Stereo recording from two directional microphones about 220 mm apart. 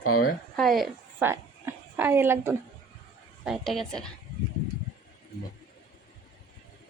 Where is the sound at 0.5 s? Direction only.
Centre (ahead or behind).